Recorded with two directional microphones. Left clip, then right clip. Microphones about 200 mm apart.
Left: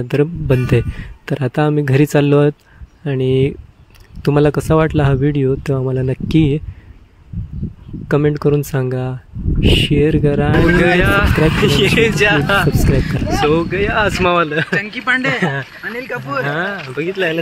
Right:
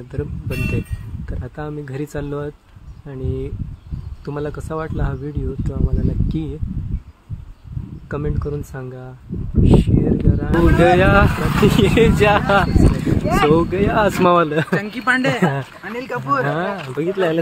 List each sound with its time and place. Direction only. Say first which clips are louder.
0.1 s speech: left 13 dB; 45° left (ahead or behind)
8.1 s speech: left 11 dB; 45° left (ahead or behind)
10.8 s speech: even; centre (ahead or behind)
14.7 s speech: left 2 dB; 25° right (ahead or behind)
16.4 s speech: left 2 dB; 5° right (ahead or behind)